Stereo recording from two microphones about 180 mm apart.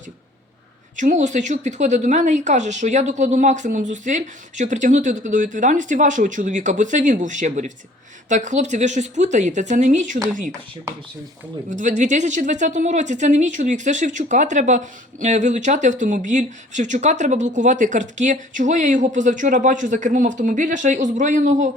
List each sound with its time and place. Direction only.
0.9 s speech: 45° right (ahead or behind)
11.7 s speech: 45° right (ahead or behind)